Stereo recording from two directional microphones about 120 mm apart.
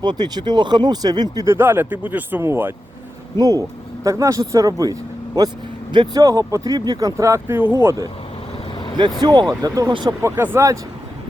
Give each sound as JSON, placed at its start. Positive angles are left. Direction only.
{"t": 0.0, "sound": "speech", "side_deg": -40}
{"t": 1.5, "sound": "speech", "side_deg": -20}
{"t": 3.3, "sound": "speech", "side_deg": -30}
{"t": 9.2, "sound": "speech", "side_deg": -35}
{"t": 10.2, "sound": "speech", "side_deg": -20}